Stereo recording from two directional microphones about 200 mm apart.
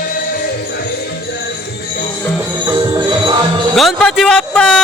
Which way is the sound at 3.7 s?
Centre (ahead or behind).